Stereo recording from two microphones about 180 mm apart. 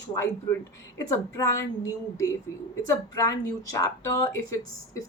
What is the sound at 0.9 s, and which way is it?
Speech, 20° left (ahead or behind).